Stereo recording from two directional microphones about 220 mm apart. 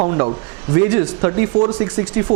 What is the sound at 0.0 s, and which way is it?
Speech, 25° right (ahead or behind).